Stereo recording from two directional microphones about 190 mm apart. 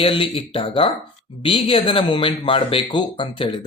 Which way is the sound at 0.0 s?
30° left (ahead or behind).